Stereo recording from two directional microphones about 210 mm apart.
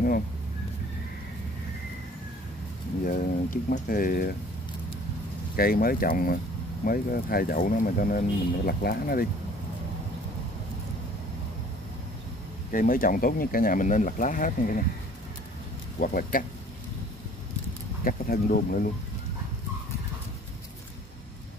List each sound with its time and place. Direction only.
3.1 s speech: 40° left (ahead or behind)
5.6 s speech: 45° left (ahead or behind)
12.7 s speech: 40° left (ahead or behind)
16.0 s speech: 40° left (ahead or behind)
18.0 s speech: 45° left (ahead or behind)